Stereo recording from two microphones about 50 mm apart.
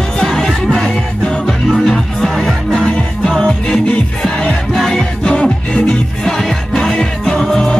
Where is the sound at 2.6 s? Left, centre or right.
Left.